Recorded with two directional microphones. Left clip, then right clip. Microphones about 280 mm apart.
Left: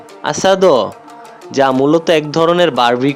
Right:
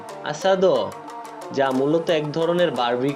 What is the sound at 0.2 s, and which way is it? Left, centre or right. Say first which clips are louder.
Speech: left 8 dB; left.